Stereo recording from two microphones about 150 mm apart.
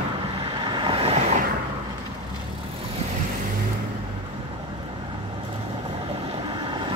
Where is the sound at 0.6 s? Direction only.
30° right (ahead or behind).